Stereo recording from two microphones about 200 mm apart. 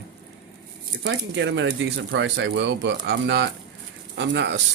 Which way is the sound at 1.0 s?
65° right (ahead or behind).